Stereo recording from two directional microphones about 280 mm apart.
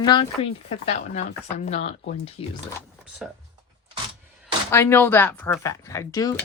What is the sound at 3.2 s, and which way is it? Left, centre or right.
Speech, centre.